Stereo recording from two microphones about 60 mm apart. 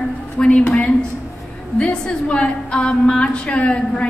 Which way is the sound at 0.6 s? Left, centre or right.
Left.